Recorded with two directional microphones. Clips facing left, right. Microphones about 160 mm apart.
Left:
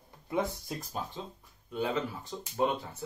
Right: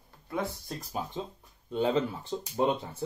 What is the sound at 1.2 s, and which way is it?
Speech, 20° right (ahead or behind).